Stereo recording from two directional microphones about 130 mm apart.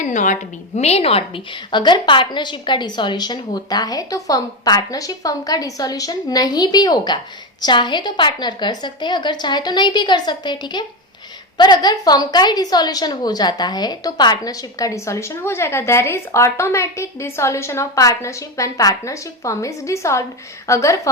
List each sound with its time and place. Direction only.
0.0 s a woman's voice: 75° left (ahead or behind)
0.8 s a woman's voice: 50° left (ahead or behind); by 21.1 s 25° left (ahead or behind)